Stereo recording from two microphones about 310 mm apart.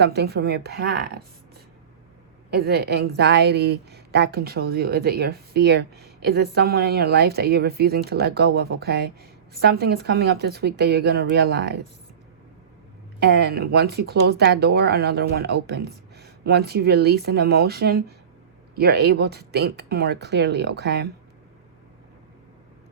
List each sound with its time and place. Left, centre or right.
0.0 s a woman's voice: right
2.5 s a woman's voice: right
13.1 s a woman's voice: right